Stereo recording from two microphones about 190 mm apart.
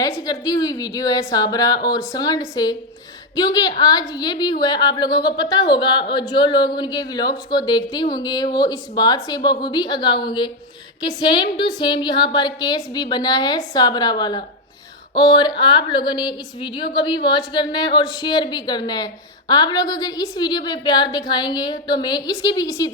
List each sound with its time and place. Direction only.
0.0 s a woman's voice: 20° left (ahead or behind)